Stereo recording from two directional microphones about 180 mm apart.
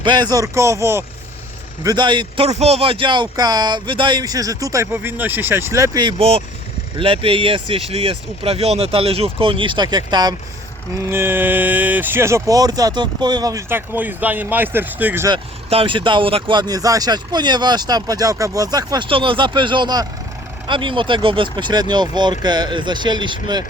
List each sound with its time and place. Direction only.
0.0 s speech: 25° right (ahead or behind)
15.3 s speech: 30° right (ahead or behind)